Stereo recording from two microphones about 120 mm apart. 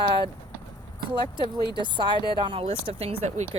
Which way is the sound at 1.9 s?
40° right (ahead or behind).